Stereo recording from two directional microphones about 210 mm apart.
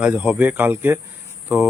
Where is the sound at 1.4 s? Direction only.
5° right (ahead or behind).